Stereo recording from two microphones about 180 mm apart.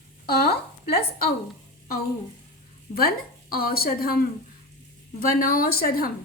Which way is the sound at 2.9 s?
55° left (ahead or behind).